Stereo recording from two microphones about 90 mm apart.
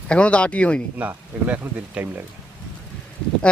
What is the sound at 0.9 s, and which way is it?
Speech, 20° right (ahead or behind).